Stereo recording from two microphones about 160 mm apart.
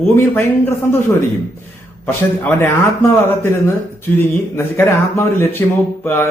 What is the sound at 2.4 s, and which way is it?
Speech, 15° left (ahead or behind).